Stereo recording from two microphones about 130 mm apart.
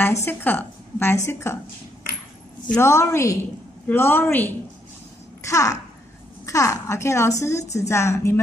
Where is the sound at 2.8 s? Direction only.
20° left (ahead or behind).